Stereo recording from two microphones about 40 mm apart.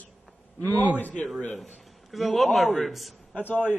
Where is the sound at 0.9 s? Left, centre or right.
Left.